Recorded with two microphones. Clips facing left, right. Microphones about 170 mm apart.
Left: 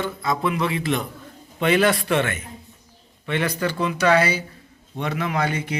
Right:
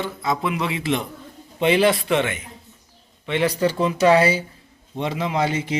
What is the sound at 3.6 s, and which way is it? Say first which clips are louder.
Speech: right 4 dB; 30° right (ahead or behind).